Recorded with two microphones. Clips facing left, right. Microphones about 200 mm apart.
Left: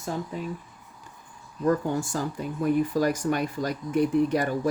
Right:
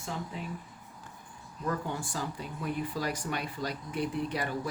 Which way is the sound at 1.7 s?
45° left (ahead or behind).